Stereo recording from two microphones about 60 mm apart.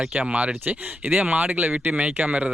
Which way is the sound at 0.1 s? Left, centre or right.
Right.